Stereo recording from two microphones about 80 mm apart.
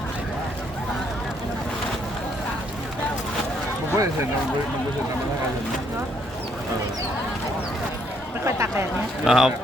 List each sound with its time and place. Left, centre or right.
3.9 s speech: right
8.4 s speech: right
9.2 s speech: centre